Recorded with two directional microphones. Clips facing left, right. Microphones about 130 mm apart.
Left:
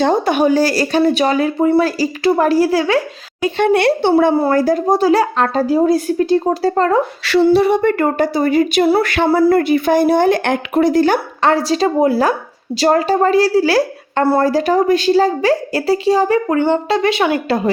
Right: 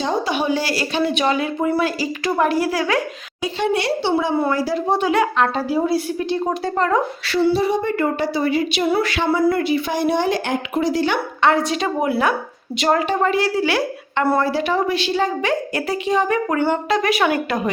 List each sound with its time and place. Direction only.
0.0 s a woman's voice: 50° left (ahead or behind); by 3.0 s 30° left (ahead or behind)
3.4 s speech: 55° left (ahead or behind)
4.4 s a woman's voice: 45° left (ahead or behind)
7.5 s speech: 65° left (ahead or behind); by 8.9 s 45° left (ahead or behind)
9.0 s a woman's voice: 55° left (ahead or behind); by 17.6 s 25° left (ahead or behind)